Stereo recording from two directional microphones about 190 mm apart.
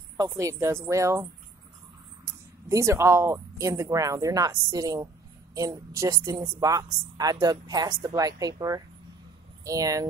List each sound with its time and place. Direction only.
0.2 s speech: 15° right (ahead or behind)
2.2 s speech: 15° right (ahead or behind)